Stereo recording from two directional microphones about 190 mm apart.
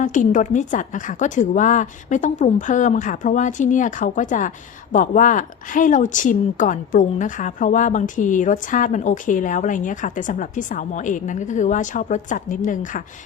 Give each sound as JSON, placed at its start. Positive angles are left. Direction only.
{"t": 0.0, "sound": "a woman's voice", "side_deg": 40}